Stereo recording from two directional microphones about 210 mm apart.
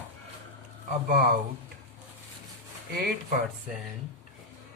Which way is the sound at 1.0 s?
45° right (ahead or behind).